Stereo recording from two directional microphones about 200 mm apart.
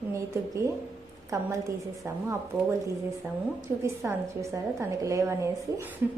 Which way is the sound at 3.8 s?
15° right (ahead or behind).